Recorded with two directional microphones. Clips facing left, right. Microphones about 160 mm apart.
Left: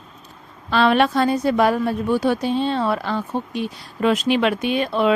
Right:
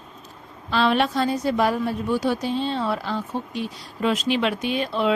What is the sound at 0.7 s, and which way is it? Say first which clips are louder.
A woman's voice: left 4 dB; 60° left (ahead or behind).